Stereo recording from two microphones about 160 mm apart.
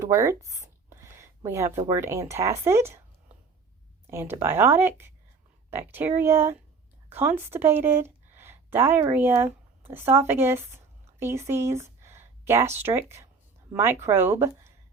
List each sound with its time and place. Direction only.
0.0 s a sound: 20° right (ahead or behind)
1.9 s speech: 20° right (ahead or behind)
4.0 s a woman's voice: 15° right (ahead or behind)